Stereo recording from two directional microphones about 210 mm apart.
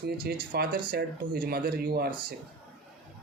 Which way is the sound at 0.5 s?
45° right (ahead or behind).